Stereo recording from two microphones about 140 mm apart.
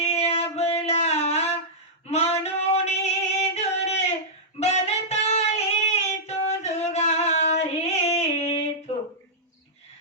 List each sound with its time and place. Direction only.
0.0 s a sound: 50° left (ahead or behind)
2.0 s singing: 50° left (ahead or behind)
4.6 s female singing: 50° left (ahead or behind)